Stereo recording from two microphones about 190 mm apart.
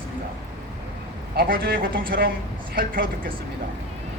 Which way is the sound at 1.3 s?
55° right (ahead or behind).